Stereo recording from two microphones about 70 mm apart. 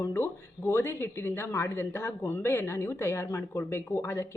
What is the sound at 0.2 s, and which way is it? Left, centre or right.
Speech, left.